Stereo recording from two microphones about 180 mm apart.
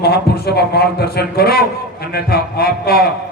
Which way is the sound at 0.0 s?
60° left (ahead or behind).